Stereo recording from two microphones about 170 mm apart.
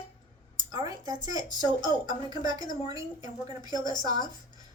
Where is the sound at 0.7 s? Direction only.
20° right (ahead or behind).